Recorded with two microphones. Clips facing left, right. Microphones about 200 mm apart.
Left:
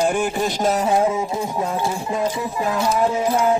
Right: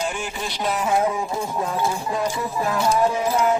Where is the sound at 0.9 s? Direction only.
25° left (ahead or behind).